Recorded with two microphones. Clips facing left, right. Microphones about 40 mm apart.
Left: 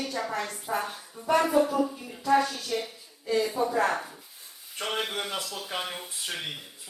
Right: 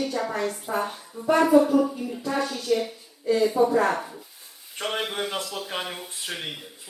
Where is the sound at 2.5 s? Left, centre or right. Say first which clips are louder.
Right 7 dB; centre.